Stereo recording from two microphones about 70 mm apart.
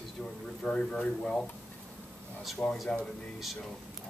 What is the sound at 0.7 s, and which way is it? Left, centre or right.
Speech, centre.